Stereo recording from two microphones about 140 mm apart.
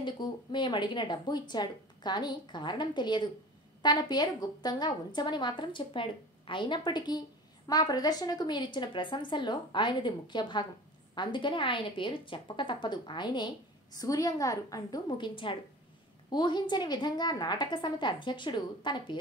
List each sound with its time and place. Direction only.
0.0 s a woman's voice: 35° left (ahead or behind)